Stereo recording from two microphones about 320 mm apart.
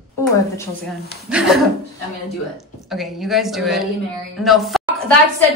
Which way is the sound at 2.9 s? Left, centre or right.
Centre.